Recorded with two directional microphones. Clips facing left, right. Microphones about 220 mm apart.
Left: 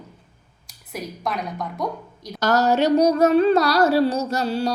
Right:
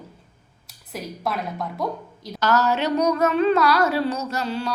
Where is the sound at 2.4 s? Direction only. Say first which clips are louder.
Left 3 dB; 45° left (ahead or behind).